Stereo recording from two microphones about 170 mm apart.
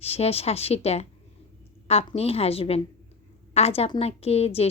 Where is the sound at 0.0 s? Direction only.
35° left (ahead or behind).